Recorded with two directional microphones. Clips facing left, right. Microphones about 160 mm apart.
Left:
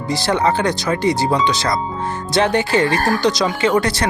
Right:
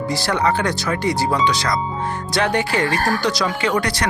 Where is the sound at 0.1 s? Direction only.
25° left (ahead or behind).